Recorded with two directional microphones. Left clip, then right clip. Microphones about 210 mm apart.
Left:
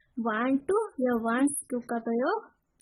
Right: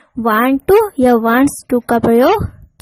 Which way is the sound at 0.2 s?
40° right (ahead or behind).